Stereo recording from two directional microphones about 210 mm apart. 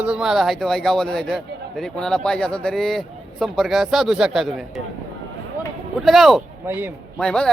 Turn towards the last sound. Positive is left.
turn(degrees=5)  # may be behind; listen again after turning